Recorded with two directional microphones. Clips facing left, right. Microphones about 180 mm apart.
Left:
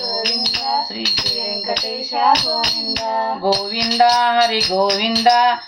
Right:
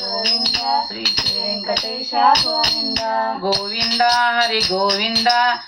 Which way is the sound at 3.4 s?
20° left (ahead or behind).